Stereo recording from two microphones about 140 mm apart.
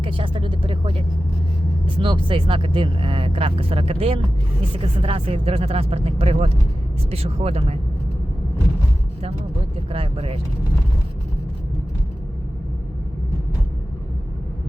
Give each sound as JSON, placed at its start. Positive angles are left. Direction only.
{"t": 0.0, "sound": "speech", "side_deg": -40}
{"t": 9.9, "sound": "speech", "side_deg": -40}